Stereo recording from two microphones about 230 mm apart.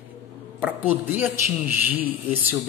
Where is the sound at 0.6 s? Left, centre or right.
Centre.